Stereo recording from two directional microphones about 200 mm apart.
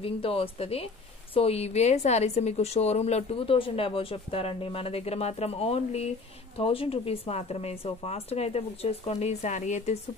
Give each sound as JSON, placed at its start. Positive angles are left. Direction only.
{"t": 0.0, "sound": "a woman's voice", "side_deg": 30}